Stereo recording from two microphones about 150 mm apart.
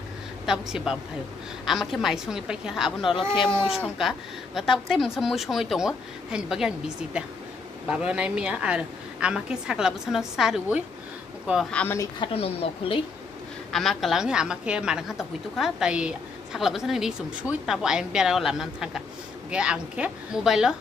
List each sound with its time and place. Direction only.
0.5 s a woman's voice: 5° right (ahead or behind)
11.7 s speech: 10° left (ahead or behind)
12.3 s speech: 40° left (ahead or behind)
13.7 s a woman's voice: centre (ahead or behind)